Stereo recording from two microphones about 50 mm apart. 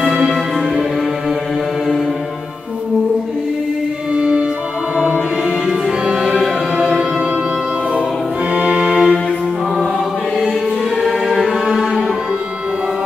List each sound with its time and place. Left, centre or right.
0.0 s music: centre
4.1 s music: right; by 7.0 s centre
8.5 s music: right
11.0 s music: centre